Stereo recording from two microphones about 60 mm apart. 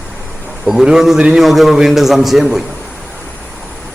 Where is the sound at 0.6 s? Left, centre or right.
Centre.